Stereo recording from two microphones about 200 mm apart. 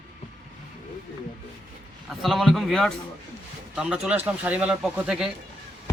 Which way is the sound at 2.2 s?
Centre (ahead or behind).